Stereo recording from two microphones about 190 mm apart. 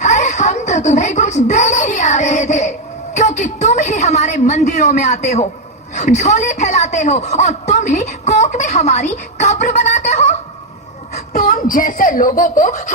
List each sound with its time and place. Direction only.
0.0 s speech: 40° left (ahead or behind)
11.3 s a child's voice: 45° left (ahead or behind)